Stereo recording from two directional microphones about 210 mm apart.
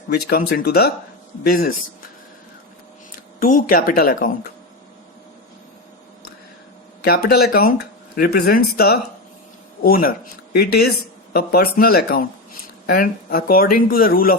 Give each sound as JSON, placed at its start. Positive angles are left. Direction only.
{"t": 0.1, "sound": "speech", "side_deg": 45}
{"t": 3.4, "sound": "speech", "side_deg": 40}
{"t": 7.0, "sound": "speech", "side_deg": 50}